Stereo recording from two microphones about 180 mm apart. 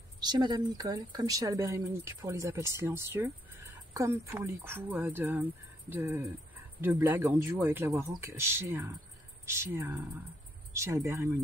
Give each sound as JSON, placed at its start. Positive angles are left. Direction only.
{"t": 0.2, "sound": "speech", "side_deg": -25}